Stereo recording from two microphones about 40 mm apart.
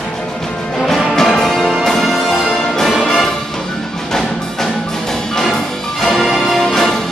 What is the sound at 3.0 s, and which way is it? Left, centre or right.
Music, centre.